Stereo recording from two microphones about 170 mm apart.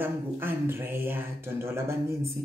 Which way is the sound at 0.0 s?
15° right (ahead or behind).